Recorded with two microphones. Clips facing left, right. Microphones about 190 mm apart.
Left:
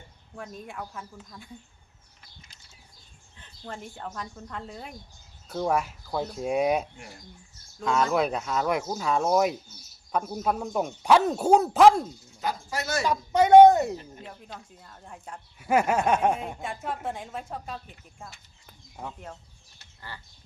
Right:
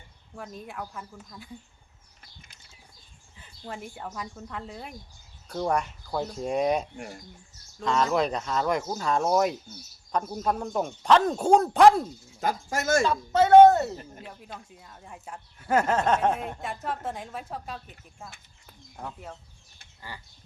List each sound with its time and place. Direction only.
0.3 s a woman's voice: centre (ahead or behind)
3.4 s a woman's voice: 10° right (ahead or behind)
12.4 s speech: 50° right (ahead or behind)
13.1 s speech: 15° left (ahead or behind)
14.3 s a woman's voice: 5° right (ahead or behind)
15.5 s a woman's voice: 10° left (ahead or behind)
18.6 s bird: centre (ahead or behind)
20.0 s a sound: 15° right (ahead or behind)